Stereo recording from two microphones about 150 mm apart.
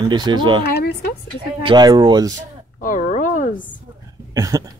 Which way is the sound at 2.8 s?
60° left (ahead or behind).